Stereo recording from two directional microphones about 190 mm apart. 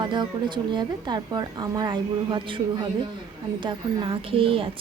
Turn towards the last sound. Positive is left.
turn(degrees=-30)  # may be behind; listen again after turning